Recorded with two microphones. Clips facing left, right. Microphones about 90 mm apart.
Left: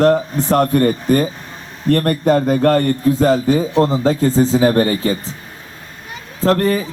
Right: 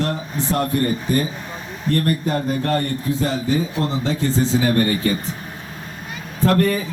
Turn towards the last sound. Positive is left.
turn(degrees=30)  # may be behind; listen again after turning